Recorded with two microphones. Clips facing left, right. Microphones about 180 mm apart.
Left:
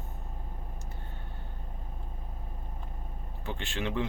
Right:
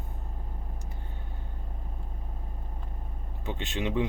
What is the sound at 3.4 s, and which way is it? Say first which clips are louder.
Speech: right 3 dB; 20° right (ahead or behind).